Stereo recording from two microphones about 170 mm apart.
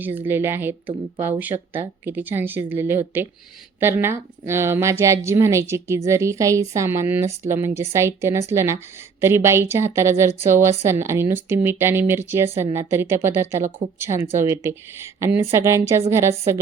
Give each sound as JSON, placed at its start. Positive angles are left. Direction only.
{"t": 0.0, "sound": "a woman's voice", "side_deg": -10}